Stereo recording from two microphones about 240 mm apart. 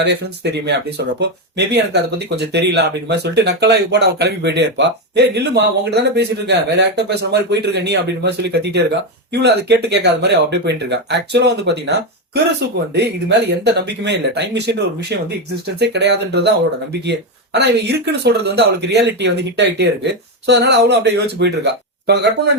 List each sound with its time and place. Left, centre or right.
0.0 s speech: right